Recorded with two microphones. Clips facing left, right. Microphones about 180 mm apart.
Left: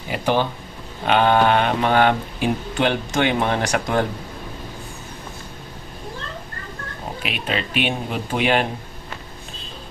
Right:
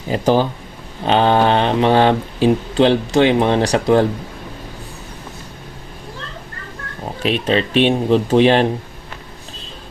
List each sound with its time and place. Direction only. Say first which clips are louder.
0.1 s speech: right 5 dB; 35° right (ahead or behind)
7.2 s speech: right 10 dB; 35° right (ahead or behind)